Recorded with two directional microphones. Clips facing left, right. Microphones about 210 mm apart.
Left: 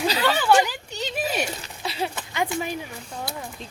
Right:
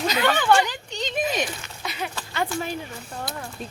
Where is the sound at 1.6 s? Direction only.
30° left (ahead or behind).